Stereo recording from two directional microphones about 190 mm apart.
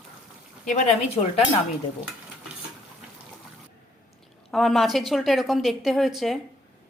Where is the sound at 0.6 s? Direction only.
40° left (ahead or behind).